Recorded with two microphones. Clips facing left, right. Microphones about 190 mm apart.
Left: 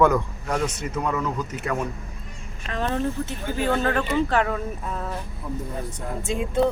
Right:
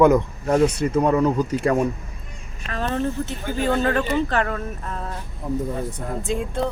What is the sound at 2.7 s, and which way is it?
Speech, 15° left (ahead or behind).